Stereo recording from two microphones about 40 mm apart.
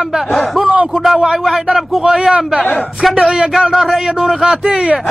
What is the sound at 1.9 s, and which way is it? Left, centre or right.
A man's voice, centre.